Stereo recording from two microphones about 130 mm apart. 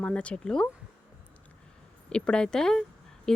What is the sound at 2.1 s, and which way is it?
Speech, 5° left (ahead or behind).